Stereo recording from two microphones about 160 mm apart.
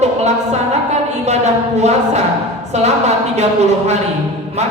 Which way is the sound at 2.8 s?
45° right (ahead or behind).